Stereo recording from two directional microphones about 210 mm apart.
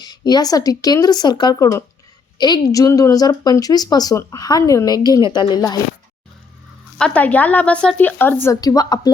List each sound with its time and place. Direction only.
0.0 s a woman's voice: 20° left (ahead or behind)
7.0 s a woman's voice: 5° left (ahead or behind)